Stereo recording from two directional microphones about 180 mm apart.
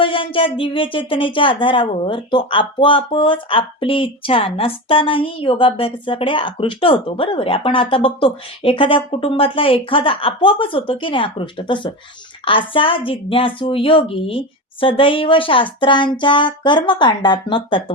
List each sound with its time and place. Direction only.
0.0 s speech: 30° left (ahead or behind)